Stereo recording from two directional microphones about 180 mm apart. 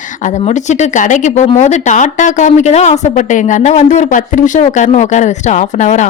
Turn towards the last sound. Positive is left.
turn(degrees=40)  # may be behind; listen again after turning